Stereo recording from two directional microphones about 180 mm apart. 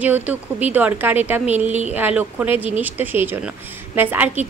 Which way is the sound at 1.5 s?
40° right (ahead or behind).